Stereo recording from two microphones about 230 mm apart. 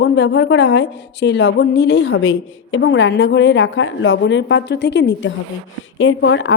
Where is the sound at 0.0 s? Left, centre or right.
Left.